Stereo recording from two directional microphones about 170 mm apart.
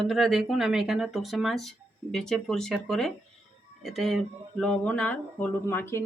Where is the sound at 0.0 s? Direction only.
Centre (ahead or behind).